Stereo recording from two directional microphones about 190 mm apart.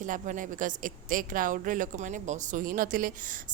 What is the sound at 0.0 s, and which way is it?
A woman's voice, 45° right (ahead or behind).